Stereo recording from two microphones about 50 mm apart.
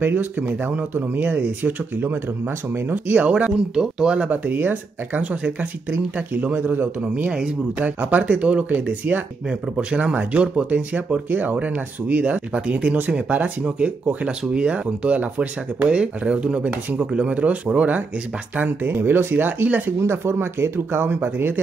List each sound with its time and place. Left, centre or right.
0.0 s speech: right
3.2 s speech: right
3.7 s speech: centre
4.3 s speech: right
7.2 s speech: centre
7.8 s speech: right
8.6 s speech: right
18.6 s speech: right
20.0 s speech: right